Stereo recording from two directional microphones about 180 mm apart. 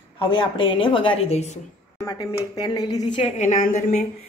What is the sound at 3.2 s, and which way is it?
Speech, 40° left (ahead or behind).